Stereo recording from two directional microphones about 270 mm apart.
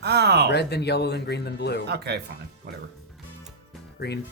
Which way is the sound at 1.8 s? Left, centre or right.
Right.